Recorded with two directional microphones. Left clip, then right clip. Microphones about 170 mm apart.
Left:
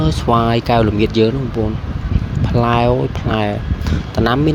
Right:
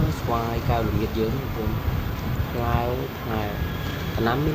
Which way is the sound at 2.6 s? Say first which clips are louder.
Left 11 dB; 50° left (ahead or behind).